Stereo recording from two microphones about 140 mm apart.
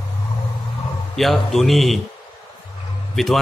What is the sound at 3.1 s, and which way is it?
Speech, centre (ahead or behind).